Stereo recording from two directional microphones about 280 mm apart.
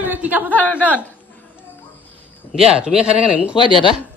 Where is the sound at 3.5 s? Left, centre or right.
Centre.